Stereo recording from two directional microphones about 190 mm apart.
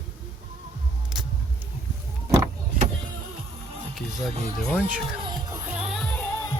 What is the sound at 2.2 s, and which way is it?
Vehicle, 15° right (ahead or behind).